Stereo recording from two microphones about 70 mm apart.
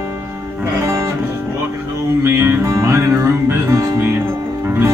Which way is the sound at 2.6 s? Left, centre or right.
Right.